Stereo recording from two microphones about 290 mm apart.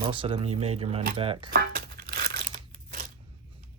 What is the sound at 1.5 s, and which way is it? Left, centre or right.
Crumpling, right.